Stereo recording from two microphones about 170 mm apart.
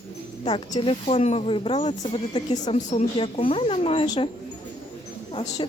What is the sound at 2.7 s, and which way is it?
Speech, 45° left (ahead or behind).